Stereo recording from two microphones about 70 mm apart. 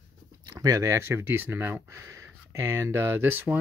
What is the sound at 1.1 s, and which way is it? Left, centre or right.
Speech, right.